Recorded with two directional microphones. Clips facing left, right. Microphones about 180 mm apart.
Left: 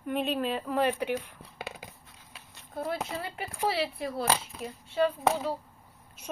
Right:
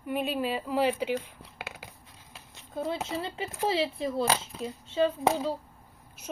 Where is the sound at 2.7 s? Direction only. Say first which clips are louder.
Right 1 dB; 25° right (ahead or behind).